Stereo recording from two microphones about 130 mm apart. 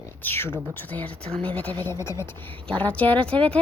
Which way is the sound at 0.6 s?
15° left (ahead or behind).